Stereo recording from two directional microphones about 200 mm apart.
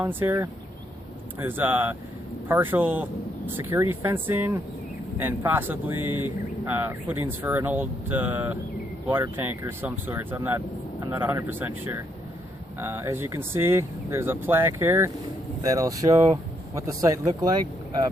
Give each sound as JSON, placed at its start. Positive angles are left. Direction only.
{"t": 0.0, "sound": "speech", "side_deg": -10}
{"t": 6.0, "sound": "speech", "side_deg": -90}
{"t": 6.7, "sound": "speech", "side_deg": -10}